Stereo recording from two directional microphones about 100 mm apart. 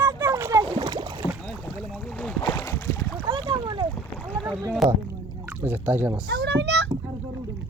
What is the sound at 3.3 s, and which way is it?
Splash, 55° right (ahead or behind).